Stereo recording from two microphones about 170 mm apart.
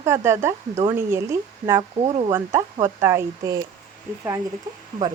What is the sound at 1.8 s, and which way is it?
Speech, 35° right (ahead or behind).